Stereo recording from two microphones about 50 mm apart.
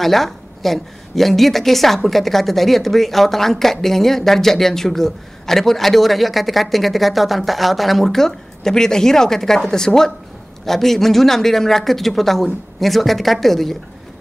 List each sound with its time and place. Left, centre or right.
0.0 s a woman's voice: centre